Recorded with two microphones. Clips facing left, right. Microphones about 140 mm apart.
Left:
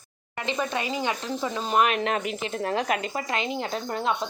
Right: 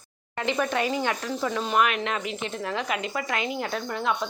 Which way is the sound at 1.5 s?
30° left (ahead or behind).